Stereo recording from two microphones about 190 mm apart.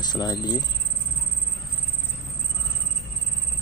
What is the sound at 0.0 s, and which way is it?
Speech, 20° left (ahead or behind).